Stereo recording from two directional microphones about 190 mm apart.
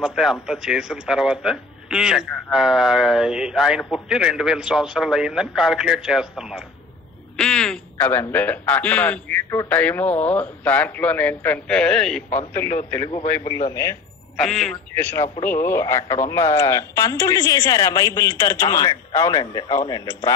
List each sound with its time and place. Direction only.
0.0 s a man's voice: centre (ahead or behind)
12.9 s a man's voice: 15° left (ahead or behind)
14.4 s a man's voice: centre (ahead or behind); by 20.0 s 20° left (ahead or behind)